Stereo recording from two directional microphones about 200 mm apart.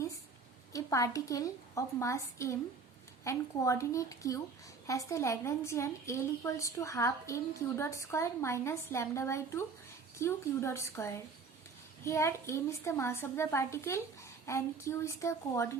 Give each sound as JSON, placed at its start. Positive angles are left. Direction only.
{"t": 0.7, "sound": "a woman's voice", "side_deg": 15}